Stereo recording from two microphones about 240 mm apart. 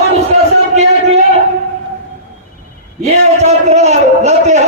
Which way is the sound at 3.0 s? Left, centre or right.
Right.